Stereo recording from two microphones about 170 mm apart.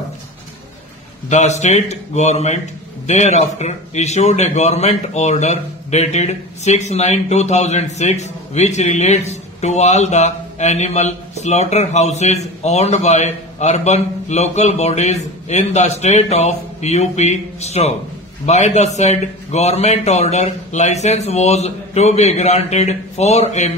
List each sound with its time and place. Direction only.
1.3 s speech: 40° left (ahead or behind)